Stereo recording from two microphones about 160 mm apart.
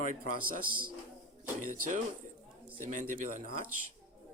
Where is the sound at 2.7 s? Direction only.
55° right (ahead or behind).